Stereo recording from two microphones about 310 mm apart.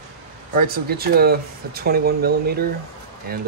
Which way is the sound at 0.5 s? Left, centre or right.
Right.